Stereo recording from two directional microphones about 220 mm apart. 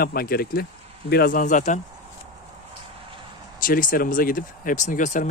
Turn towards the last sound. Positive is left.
turn(degrees=35)  # may be behind; listen again after turning